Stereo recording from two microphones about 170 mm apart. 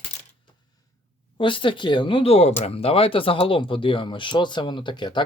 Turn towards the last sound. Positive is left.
turn(degrees=25)  # may be behind; listen again after turning